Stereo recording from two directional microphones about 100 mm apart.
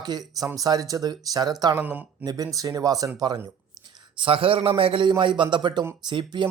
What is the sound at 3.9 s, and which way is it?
A man's voice, 60° right (ahead or behind).